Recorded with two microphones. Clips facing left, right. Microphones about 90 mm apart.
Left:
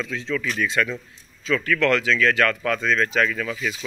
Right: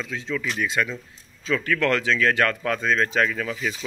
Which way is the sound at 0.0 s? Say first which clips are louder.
Left 2 dB; 20° right (ahead or behind).